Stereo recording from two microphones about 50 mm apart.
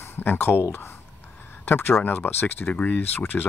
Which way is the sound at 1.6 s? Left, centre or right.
Left.